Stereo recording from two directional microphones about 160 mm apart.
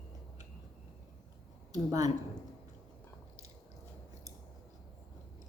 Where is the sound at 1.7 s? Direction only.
20° right (ahead or behind).